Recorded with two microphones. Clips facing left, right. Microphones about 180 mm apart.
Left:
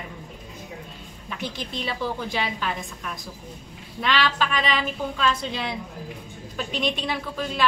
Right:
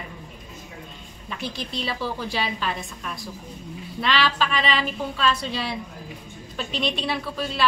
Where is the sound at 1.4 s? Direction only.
15° left (ahead or behind).